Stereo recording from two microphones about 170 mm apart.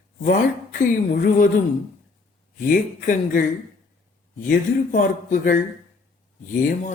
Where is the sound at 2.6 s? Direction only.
50° left (ahead or behind).